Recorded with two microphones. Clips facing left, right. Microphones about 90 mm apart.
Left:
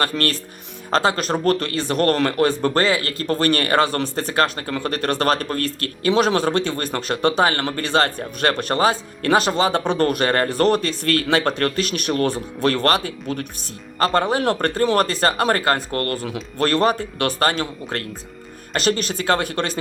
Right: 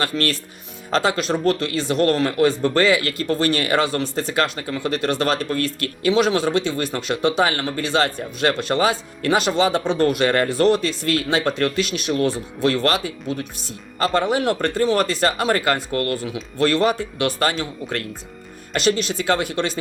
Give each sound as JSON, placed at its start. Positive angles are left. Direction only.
{"t": 0.0, "sound": "speech", "side_deg": 45}